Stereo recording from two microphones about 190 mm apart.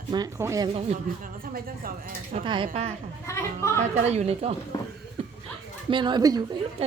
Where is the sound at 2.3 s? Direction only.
25° right (ahead or behind).